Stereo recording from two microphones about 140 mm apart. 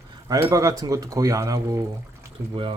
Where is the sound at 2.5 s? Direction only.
35° right (ahead or behind).